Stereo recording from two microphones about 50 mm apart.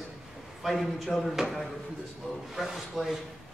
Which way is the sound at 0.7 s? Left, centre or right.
Centre.